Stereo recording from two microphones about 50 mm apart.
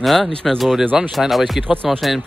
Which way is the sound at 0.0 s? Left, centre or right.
Centre.